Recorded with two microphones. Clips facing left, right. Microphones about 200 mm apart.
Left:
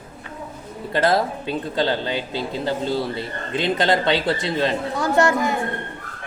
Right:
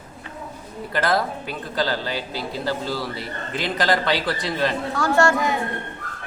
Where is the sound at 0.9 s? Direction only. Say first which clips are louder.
Left 3 dB; 25° left (ahead or behind).